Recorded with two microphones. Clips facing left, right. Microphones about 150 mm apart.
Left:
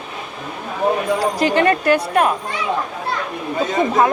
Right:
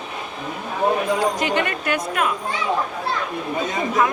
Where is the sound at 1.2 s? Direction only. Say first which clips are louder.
Left 5 dB; 35° left (ahead or behind).